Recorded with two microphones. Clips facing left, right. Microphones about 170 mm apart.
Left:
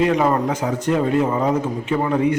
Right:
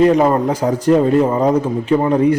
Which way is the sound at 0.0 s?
35° right (ahead or behind).